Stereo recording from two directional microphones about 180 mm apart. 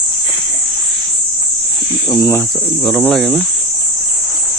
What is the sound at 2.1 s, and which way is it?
Speech, 20° left (ahead or behind).